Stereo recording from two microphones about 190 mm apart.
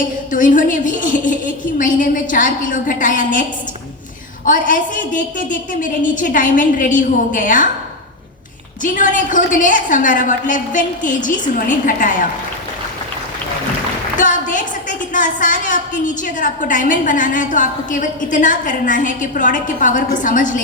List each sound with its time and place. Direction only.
0.3 s a woman's voice: 45° left (ahead or behind)
4.4 s a woman's voice: 45° left (ahead or behind)
8.8 s a woman's voice: 45° left (ahead or behind)
14.2 s a woman's voice: 40° left (ahead or behind)